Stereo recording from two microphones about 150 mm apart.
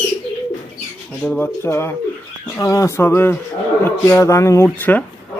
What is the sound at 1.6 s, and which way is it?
Speech, 15° left (ahead or behind).